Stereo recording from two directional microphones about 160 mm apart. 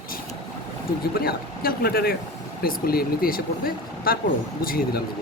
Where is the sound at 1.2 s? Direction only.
70° left (ahead or behind).